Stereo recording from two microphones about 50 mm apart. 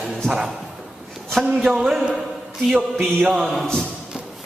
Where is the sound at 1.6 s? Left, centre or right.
Centre.